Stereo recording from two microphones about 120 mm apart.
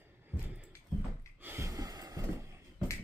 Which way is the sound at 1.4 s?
20° right (ahead or behind).